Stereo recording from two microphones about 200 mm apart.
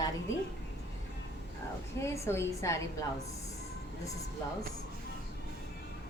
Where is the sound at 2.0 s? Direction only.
15° left (ahead or behind).